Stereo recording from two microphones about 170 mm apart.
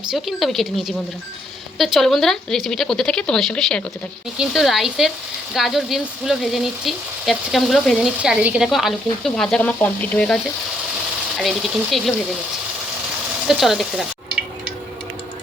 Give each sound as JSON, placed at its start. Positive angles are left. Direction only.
{"t": 0.1, "sound": "speech", "side_deg": 0}
{"t": 11.3, "sound": "speech", "side_deg": 0}
{"t": 13.5, "sound": "speech", "side_deg": 0}